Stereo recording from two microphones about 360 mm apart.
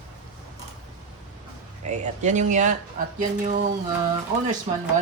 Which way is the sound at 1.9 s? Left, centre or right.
Centre.